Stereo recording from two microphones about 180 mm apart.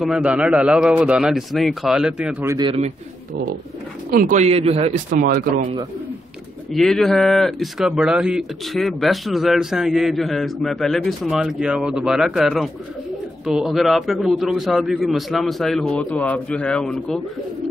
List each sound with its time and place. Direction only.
0.0 s speech: 5° right (ahead or behind)
2.5 s speech: 30° right (ahead or behind)
4.1 s speech: 50° right (ahead or behind)
5.2 s speech: 55° right (ahead or behind)
6.7 s speech: centre (ahead or behind)